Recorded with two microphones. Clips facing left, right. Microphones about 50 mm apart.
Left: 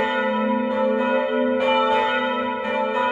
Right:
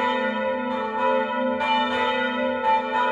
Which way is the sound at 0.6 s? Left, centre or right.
Left.